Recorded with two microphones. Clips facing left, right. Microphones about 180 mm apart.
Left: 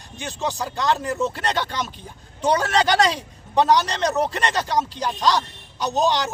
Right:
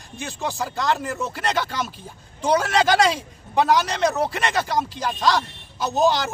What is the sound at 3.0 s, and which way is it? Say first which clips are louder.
Speech: right 1 dB; centre (ahead or behind).